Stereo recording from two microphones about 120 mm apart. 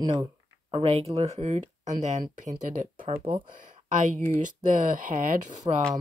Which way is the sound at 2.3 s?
90° right.